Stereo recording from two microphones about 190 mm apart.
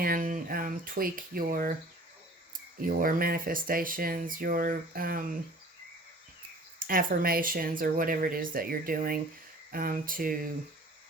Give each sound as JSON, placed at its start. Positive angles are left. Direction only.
{"t": 0.0, "sound": "speech", "side_deg": -45}
{"t": 2.7, "sound": "speech", "side_deg": -50}
{"t": 6.7, "sound": "speech", "side_deg": -50}